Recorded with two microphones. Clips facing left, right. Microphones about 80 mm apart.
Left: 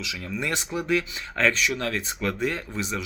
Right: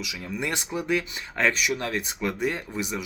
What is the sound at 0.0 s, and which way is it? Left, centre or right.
Speech, centre.